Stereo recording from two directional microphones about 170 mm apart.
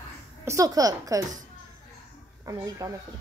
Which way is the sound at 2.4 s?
20° right (ahead or behind).